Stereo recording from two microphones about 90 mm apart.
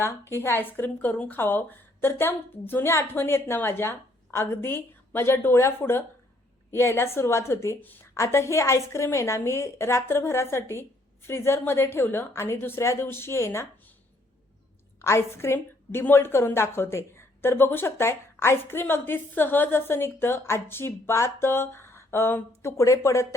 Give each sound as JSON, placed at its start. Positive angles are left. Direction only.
{"t": 0.0, "sound": "a woman's voice", "side_deg": 25}
{"t": 15.0, "sound": "a woman's voice", "side_deg": 30}